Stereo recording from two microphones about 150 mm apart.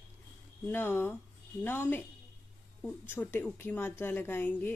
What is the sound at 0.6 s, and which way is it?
A woman's voice, 15° left (ahead or behind).